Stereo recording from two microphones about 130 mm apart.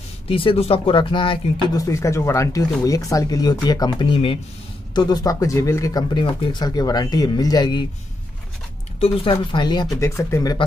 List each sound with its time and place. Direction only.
0.3 s speech: 45° left (ahead or behind)
1.8 s speech: 25° left (ahead or behind)
9.0 s speech: 45° left (ahead or behind)
9.9 s speech: 20° left (ahead or behind)